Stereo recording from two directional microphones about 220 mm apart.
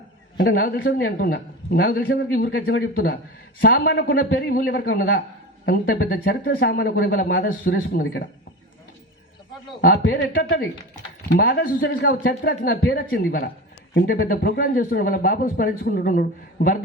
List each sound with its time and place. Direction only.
0.3 s a man's voice: 40° left (ahead or behind)
9.8 s a man's voice: 45° left (ahead or behind)
12.4 s a man's voice: 50° left (ahead or behind)